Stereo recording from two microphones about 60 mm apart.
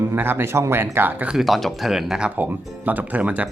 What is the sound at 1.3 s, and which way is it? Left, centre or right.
Speech, centre.